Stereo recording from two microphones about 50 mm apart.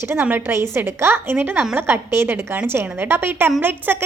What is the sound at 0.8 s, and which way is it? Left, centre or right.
A woman's voice, right.